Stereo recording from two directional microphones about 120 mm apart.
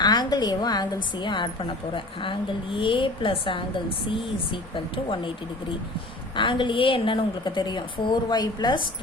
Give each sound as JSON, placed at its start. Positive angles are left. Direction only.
{"t": 0.0, "sound": "a woman's voice", "side_deg": 35}
{"t": 2.7, "sound": "a woman's voice", "side_deg": 45}
{"t": 4.7, "sound": "a woman's voice", "side_deg": 45}
{"t": 6.3, "sound": "a woman's voice", "side_deg": 45}